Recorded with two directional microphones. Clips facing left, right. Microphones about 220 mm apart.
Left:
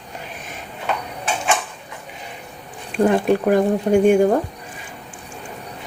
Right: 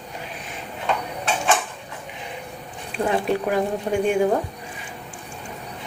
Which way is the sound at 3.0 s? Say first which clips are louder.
Left 6 dB; 50° left (ahead or behind).